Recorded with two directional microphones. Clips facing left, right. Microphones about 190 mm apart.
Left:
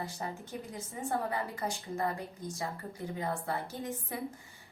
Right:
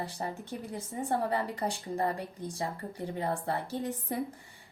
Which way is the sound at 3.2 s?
30° right (ahead or behind).